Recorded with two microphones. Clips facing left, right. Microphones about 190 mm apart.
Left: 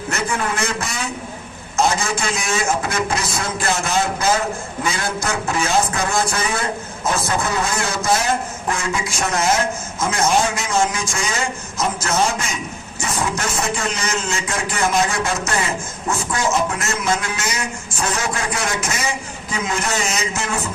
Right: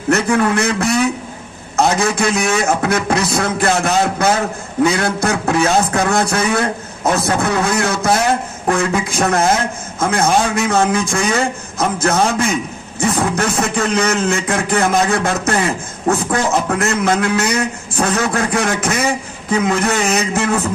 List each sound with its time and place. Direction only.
0.1 s a man's voice: 65° right (ahead or behind)